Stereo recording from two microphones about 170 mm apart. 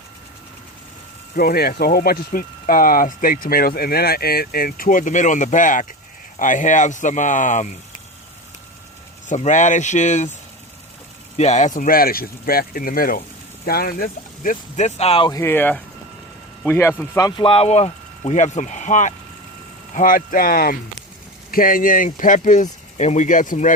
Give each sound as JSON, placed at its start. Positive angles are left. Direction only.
{"t": 1.4, "sound": "speech", "side_deg": 65}
{"t": 9.3, "sound": "speech", "side_deg": 45}
{"t": 11.3, "sound": "speech", "side_deg": 40}
{"t": 15.3, "sound": "speech", "side_deg": 15}